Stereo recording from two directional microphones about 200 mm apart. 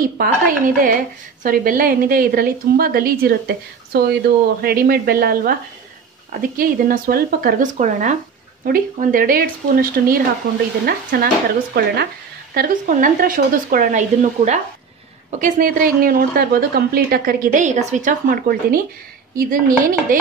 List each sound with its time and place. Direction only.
0.7 s a woman's voice: 45° right (ahead or behind)